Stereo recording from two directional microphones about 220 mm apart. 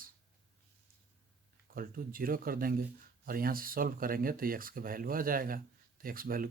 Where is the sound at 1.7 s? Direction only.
40° right (ahead or behind).